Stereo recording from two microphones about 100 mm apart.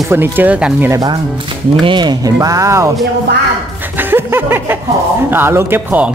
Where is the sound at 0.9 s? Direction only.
45° right (ahead or behind).